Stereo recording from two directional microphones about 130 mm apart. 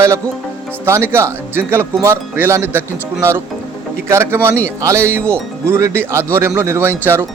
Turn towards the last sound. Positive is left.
turn(degrees=-15)  # may be behind; listen again after turning